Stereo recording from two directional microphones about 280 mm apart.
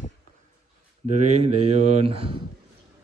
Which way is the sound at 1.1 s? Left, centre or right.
Right.